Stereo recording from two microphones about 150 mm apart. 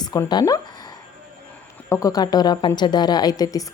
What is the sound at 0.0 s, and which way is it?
Speech, 25° left (ahead or behind).